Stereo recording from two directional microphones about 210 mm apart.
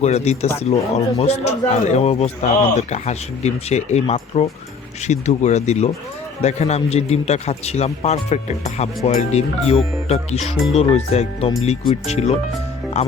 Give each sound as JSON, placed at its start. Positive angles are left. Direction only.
{"t": 0.0, "sound": "speech", "side_deg": 30}